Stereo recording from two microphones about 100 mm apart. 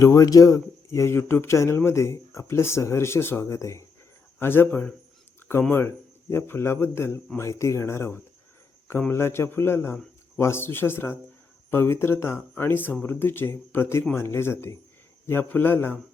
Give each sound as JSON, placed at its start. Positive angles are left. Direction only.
{"t": 0.0, "sound": "speech", "side_deg": 35}
{"t": 6.3, "sound": "speech", "side_deg": 25}